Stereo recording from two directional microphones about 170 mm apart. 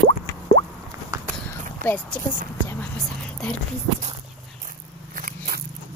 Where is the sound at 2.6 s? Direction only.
5° left (ahead or behind).